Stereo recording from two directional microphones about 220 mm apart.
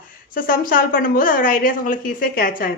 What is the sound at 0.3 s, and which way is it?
A woman's voice, 40° left (ahead or behind).